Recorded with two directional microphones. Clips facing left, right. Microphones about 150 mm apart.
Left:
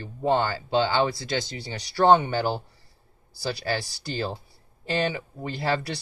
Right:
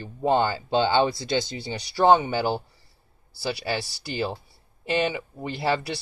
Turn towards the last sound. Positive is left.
turn(degrees=-15)  # may be behind; listen again after turning